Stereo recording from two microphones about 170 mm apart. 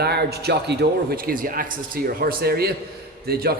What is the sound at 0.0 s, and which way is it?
A man's voice, 75° right (ahead or behind).